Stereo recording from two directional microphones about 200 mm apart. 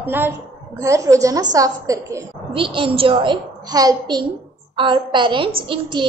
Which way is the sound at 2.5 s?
25° right (ahead or behind).